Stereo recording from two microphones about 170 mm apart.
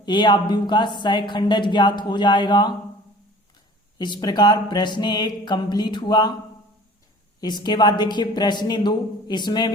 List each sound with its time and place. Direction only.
0.0 s speech: 25° left (ahead or behind)
3.9 s speech: 25° left (ahead or behind)
7.4 s speech: 25° left (ahead or behind)